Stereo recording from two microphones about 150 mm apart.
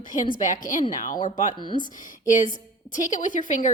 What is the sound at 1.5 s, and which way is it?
Speech, 30° right (ahead or behind).